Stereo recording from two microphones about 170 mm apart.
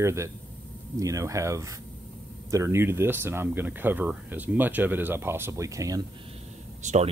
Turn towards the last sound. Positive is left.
turn(degrees=-45)  # may be behind; listen again after turning